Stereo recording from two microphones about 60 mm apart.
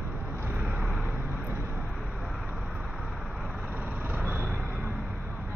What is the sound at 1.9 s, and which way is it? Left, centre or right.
Vehicle, centre.